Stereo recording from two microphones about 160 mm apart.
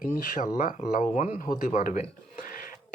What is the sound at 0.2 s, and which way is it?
Speech, 60° left (ahead or behind).